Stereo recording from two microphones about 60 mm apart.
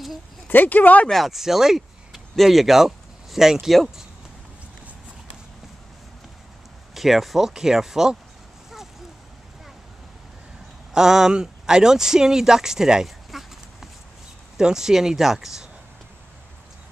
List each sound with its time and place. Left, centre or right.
0.5 s speech: left
1.1 s speech: centre
6.9 s speech: centre
10.9 s speech: centre